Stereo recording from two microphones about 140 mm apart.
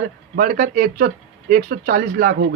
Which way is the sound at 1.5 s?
85° right.